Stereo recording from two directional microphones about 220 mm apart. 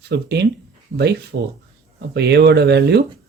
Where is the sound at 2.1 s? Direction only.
50° right (ahead or behind).